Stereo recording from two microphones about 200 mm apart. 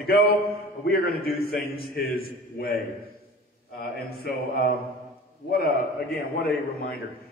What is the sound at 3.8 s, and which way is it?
Speech, 50° left (ahead or behind).